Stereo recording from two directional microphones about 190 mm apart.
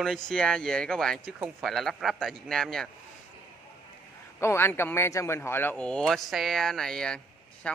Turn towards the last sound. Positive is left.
turn(degrees=5)  # may be behind; listen again after turning